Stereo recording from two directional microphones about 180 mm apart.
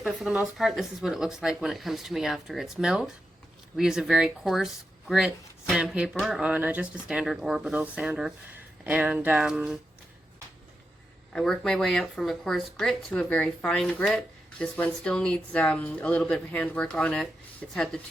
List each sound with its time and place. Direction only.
0.0 s speech: centre (ahead or behind)
11.3 s speech: 5° left (ahead or behind)